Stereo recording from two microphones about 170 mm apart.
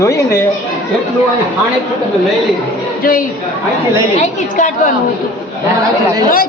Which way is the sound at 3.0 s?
55° left (ahead or behind).